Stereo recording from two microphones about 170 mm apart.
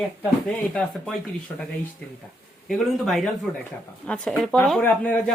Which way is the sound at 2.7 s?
Centre (ahead or behind).